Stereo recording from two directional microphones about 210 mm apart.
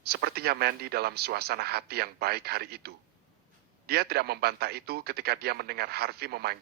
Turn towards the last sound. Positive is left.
turn(degrees=-50)  # may be behind; listen again after turning